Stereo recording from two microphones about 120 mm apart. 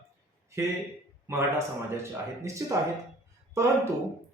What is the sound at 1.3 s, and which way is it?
Speech, 25° right (ahead or behind).